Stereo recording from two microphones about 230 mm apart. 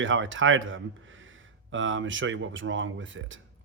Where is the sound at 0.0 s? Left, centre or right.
Right.